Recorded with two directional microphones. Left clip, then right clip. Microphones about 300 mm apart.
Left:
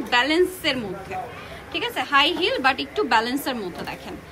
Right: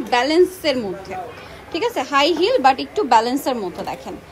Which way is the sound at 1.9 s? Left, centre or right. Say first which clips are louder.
Right 1 dB; centre.